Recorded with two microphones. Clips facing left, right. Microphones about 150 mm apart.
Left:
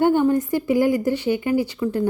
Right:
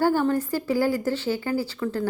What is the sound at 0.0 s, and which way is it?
A woman's voice, 20° left (ahead or behind).